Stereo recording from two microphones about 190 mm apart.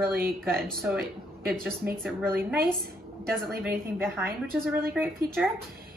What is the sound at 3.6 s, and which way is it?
A woman's voice, 10° right (ahead or behind).